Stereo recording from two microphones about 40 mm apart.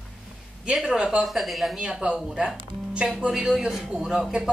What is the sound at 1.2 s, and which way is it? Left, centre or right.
Speech, centre.